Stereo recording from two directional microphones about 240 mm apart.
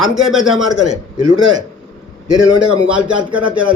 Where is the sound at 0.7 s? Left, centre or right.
Centre.